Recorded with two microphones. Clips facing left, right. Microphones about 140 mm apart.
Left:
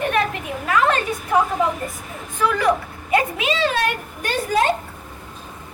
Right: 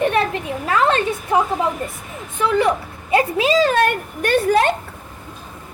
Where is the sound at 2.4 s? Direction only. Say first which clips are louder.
Right 2 dB; 25° right (ahead or behind); by 4.6 s 60° right (ahead or behind).